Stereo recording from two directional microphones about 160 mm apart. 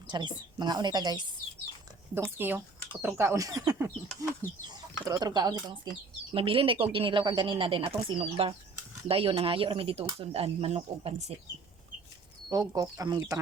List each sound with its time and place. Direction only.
0.1 s speech: 30° right (ahead or behind)
2.4 s speech: 15° right (ahead or behind); by 11.1 s 40° right (ahead or behind)
12.5 s speech: 25° right (ahead or behind)